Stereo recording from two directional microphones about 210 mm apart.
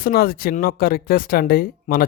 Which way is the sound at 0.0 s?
45° left (ahead or behind).